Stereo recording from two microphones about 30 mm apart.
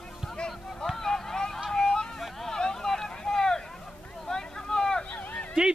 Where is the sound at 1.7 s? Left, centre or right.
Left.